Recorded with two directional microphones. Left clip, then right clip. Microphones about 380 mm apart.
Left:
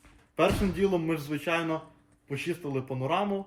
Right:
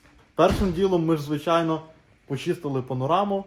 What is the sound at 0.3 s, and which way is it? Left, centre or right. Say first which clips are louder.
Speech: right 5 dB; centre.